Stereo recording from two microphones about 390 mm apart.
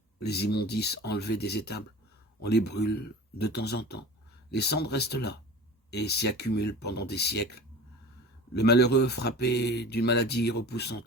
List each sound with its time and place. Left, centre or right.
0.2 s speech: left